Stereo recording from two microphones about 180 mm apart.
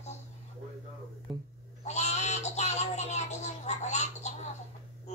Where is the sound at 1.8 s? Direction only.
40° left (ahead or behind).